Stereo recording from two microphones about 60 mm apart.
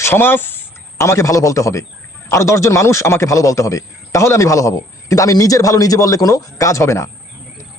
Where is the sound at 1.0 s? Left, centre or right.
Left.